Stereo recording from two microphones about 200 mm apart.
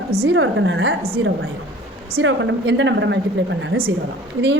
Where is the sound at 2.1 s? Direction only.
70° right (ahead or behind).